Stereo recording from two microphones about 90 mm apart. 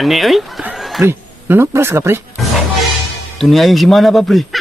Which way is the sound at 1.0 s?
25° right (ahead or behind).